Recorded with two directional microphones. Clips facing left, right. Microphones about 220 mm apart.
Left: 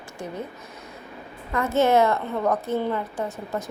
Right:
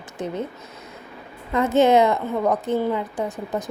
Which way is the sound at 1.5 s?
20° right (ahead or behind).